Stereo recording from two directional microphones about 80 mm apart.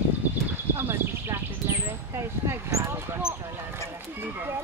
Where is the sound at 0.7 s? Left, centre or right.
Right.